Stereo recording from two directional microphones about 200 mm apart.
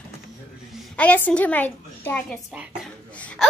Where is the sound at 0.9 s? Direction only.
10° left (ahead or behind).